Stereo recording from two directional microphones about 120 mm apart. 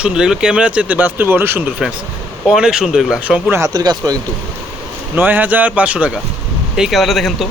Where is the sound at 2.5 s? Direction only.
5° right (ahead or behind).